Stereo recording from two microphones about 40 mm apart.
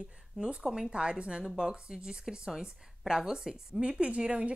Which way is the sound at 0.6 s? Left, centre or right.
Centre.